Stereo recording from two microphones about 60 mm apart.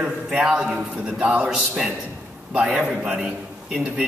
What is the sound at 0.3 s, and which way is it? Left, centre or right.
A man's voice, centre.